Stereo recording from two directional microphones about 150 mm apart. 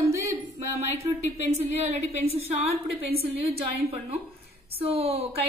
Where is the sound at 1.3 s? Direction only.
45° right (ahead or behind).